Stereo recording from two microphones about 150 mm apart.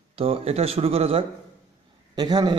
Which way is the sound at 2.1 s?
30° right (ahead or behind).